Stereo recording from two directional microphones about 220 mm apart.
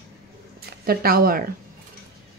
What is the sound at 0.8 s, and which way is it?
Speech, 40° right (ahead or behind).